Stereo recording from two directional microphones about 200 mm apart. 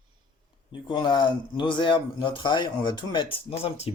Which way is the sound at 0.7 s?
25° left (ahead or behind).